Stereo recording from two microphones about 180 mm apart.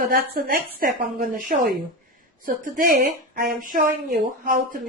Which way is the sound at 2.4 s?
50° right (ahead or behind).